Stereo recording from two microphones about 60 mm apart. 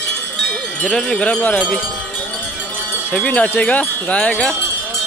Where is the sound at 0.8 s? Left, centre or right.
Centre.